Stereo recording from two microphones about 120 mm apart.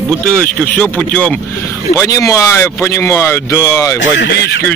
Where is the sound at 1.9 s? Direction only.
25° left (ahead or behind).